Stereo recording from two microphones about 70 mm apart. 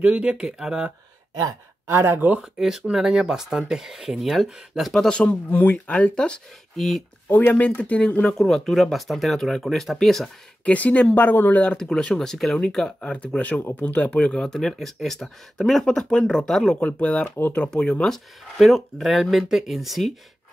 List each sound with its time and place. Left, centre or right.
0.0 s speech: centre
1.4 s speech: right
2.1 s speech: right
2.6 s speech: centre
5.1 s speech: centre
5.5 s speech: left
7.2 s speech: left
8.4 s speech: centre
10.6 s speech: centre
11.6 s speech: centre
16.8 s speech: centre